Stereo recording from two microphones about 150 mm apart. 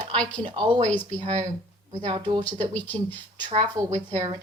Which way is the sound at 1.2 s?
50° right (ahead or behind).